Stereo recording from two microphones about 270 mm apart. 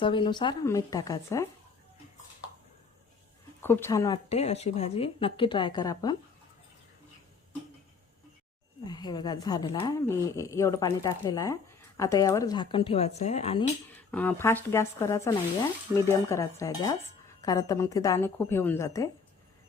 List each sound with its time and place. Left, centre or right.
0.0 s a woman's voice: centre
3.6 s a woman's voice: centre
8.8 s a woman's voice: centre
14.1 s a woman's voice: centre